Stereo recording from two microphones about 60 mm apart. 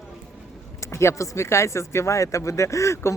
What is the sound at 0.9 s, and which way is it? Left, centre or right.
Speech, left.